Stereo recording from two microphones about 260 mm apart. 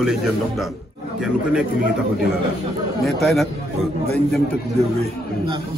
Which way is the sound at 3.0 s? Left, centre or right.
Centre.